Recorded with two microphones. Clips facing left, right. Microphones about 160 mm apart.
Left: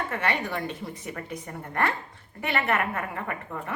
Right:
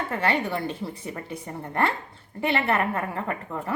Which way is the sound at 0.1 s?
30° right (ahead or behind).